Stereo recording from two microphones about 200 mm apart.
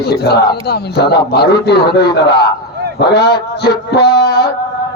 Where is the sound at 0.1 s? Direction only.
55° left (ahead or behind).